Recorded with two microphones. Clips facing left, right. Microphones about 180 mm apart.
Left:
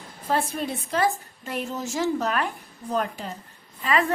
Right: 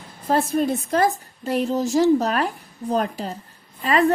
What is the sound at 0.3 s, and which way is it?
A woman's voice, 40° right (ahead or behind).